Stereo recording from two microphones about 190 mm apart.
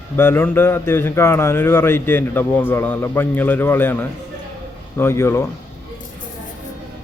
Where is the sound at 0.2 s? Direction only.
10° left (ahead or behind).